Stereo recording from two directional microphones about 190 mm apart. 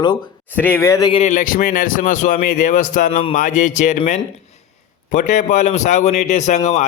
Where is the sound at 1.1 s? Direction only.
35° left (ahead or behind).